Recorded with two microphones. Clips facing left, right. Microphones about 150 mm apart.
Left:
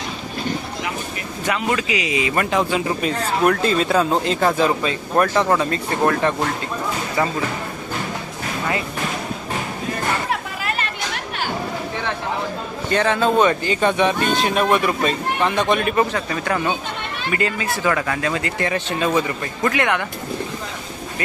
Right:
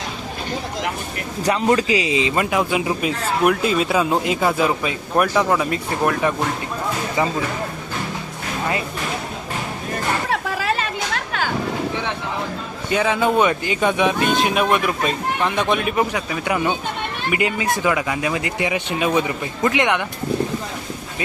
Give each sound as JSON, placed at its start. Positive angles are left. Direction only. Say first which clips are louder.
{"t": 1.5, "sound": "speech", "louder": "right 4 dB", "side_deg": -30}
{"t": 2.5, "sound": "speech", "louder": "even", "side_deg": -10}
{"t": 12.9, "sound": "a man's voice", "louder": "even", "side_deg": -10}